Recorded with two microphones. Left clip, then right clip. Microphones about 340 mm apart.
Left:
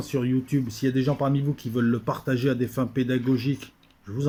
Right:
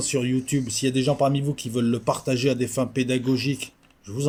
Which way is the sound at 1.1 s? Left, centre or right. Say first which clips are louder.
Right 4 dB; right.